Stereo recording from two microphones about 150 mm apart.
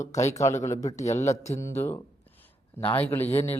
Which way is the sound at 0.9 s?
50° left (ahead or behind).